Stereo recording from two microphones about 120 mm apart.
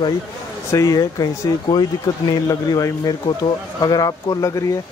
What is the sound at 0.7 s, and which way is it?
Speech, 25° left (ahead or behind).